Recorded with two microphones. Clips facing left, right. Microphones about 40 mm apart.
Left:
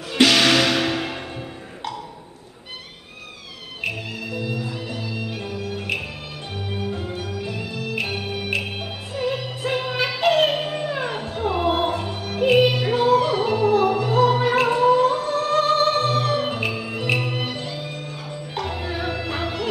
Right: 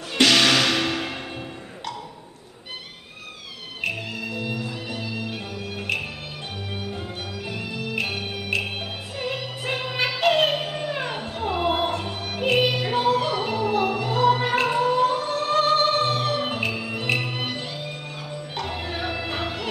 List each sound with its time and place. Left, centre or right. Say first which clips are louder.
0.1 s music: left 2 dB; centre
4.6 s music: left 2 dB; centre
9.2 s music: left 5 dB; centre
12.1 s music: left 2 dB; centre
12.4 s music: left 4 dB; centre
12.9 s music: left 4 dB; centre
13.3 s music: left 5 dB; centre
15.0 s music: left 2 dB; centre